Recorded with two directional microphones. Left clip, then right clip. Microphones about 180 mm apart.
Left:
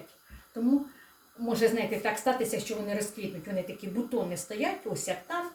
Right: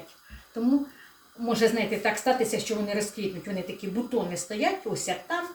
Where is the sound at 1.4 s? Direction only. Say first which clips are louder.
Right 3 dB; centre (ahead or behind).